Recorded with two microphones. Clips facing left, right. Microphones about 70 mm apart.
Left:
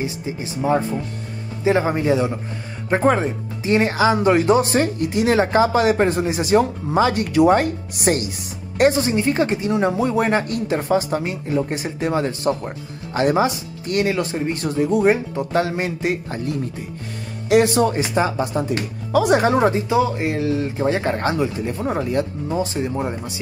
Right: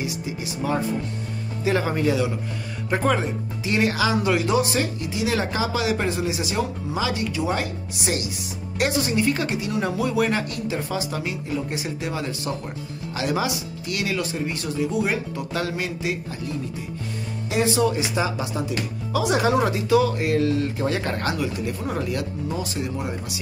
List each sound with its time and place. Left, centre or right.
0.0 s speech: left
16.0 s speech: left
17.5 s speech: left